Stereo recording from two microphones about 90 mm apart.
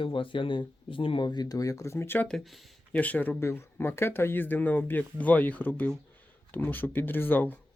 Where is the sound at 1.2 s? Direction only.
50° left (ahead or behind); by 2.3 s 25° left (ahead or behind).